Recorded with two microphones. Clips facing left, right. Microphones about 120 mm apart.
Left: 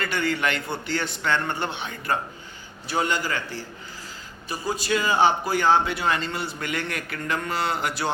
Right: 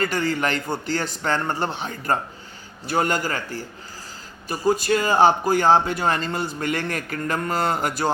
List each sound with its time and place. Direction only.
0.0 s a man's voice: 40° right (ahead or behind)